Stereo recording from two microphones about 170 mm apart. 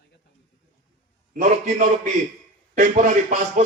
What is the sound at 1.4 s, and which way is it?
A man's voice, 45° right (ahead or behind).